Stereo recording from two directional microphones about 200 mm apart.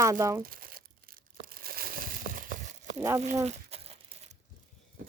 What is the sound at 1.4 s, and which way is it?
Crushing, 45° right (ahead or behind).